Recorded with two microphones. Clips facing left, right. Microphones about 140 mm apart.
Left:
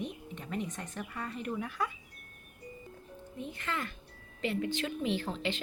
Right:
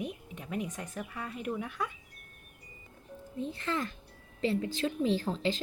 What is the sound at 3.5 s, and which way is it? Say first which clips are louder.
A woman's voice: right 3 dB; 35° right (ahead or behind).